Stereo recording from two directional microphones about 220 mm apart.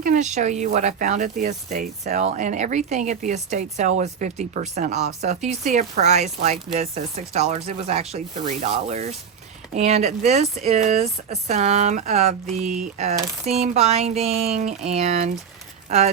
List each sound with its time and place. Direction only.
0.0 s speech: 35° right (ahead or behind)